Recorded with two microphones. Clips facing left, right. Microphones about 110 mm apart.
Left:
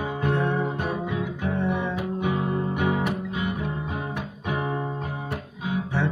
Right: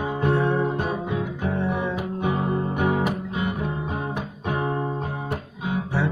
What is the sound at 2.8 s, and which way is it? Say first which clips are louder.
Music: right 3 dB; 45° right (ahead or behind).